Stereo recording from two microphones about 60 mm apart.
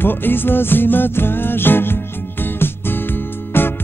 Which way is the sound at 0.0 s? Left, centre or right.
Left.